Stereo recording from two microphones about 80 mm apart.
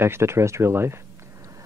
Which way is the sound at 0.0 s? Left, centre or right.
Right.